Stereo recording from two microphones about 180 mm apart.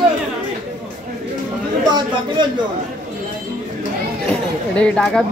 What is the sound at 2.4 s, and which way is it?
Speech, 25° right (ahead or behind).